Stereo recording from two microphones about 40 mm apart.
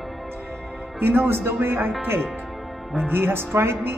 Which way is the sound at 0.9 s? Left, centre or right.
Right.